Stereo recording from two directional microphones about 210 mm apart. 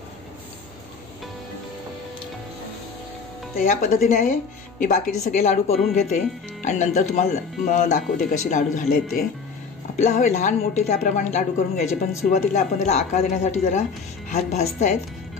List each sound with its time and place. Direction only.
3.6 s speech: 35° left (ahead or behind)
9.9 s speech: 35° left (ahead or behind)